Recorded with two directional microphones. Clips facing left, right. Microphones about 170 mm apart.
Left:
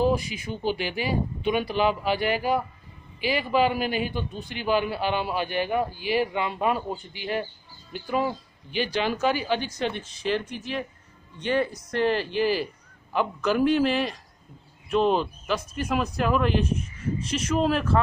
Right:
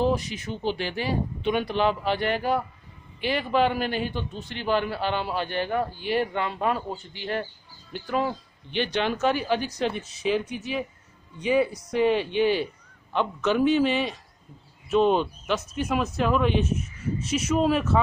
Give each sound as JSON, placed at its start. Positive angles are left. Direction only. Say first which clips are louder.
{"t": 0.0, "sound": "a man's voice", "louder": "left 1 dB", "side_deg": 10}